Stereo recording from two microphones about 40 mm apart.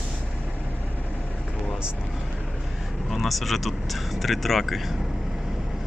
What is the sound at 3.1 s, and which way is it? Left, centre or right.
Speech, centre.